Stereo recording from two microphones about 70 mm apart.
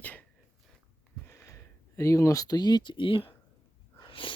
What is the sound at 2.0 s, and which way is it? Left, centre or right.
Speech, left.